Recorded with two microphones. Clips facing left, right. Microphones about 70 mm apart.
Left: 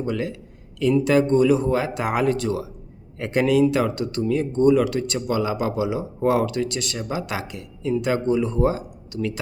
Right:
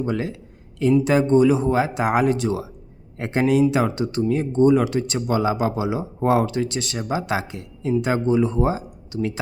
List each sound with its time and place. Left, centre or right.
0.0 s speech: right